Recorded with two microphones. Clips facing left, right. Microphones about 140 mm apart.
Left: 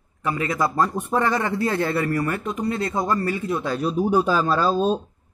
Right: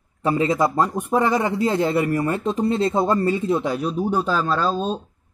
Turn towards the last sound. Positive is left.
turn(degrees=10)  # may be behind; listen again after turning